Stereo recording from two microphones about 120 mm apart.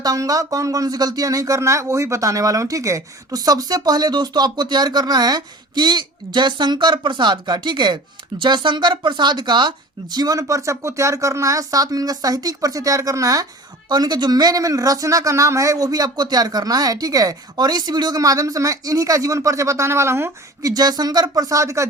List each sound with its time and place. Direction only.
0.0 s speech: 30° right (ahead or behind)